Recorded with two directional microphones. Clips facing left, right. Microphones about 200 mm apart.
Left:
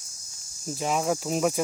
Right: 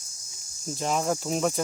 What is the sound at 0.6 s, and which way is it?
Speech, 5° left (ahead or behind).